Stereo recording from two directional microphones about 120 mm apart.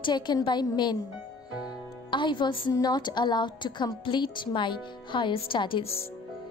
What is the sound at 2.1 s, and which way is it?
A woman's voice, 40° left (ahead or behind).